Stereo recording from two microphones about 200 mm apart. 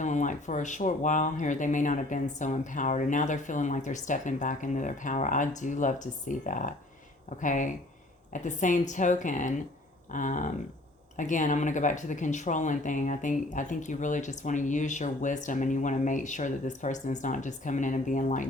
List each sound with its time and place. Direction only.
0.0 s speech: 40° left (ahead or behind)